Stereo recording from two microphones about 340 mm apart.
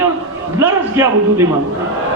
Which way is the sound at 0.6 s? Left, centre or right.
Centre.